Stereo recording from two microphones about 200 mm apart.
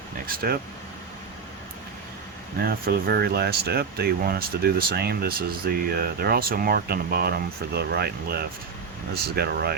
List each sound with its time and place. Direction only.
0.3 s speech: 50° right (ahead or behind)
2.6 s speech: 50° right (ahead or behind)